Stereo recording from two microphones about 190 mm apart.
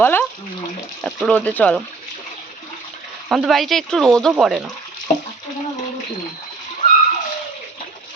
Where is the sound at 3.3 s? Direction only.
Centre (ahead or behind).